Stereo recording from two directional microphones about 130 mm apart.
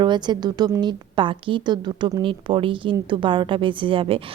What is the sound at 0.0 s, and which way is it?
A woman's voice, 35° right (ahead or behind).